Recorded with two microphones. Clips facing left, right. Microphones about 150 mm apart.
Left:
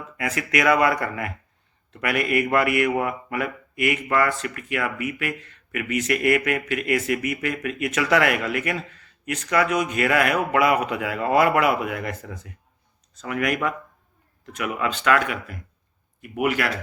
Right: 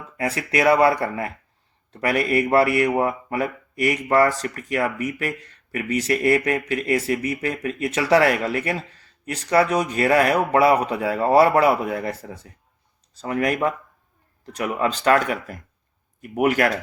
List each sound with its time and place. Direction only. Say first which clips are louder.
0.2 s speech: right 2 dB; 30° right (ahead or behind)